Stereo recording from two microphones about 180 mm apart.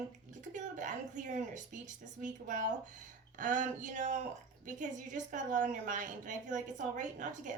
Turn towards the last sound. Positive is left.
turn(degrees=-45)  # may be behind; listen again after turning